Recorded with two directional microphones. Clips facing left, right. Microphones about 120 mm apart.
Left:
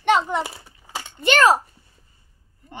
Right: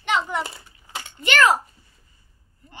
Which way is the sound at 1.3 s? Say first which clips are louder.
Left 2 dB; 30° left (ahead or behind).